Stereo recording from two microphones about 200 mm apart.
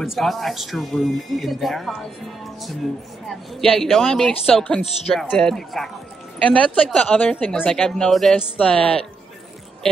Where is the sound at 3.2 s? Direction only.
Centre (ahead or behind).